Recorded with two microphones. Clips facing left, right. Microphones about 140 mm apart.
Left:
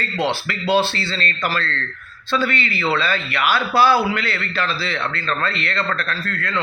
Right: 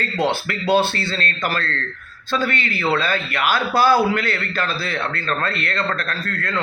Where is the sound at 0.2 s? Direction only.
50° right (ahead or behind).